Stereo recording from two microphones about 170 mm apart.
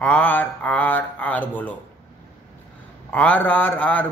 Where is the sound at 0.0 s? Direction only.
10° left (ahead or behind).